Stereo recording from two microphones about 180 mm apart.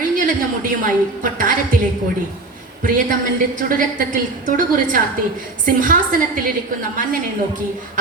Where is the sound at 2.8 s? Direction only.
50° right (ahead or behind).